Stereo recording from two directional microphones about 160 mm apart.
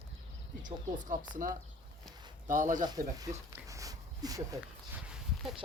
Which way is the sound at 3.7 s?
20° right (ahead or behind).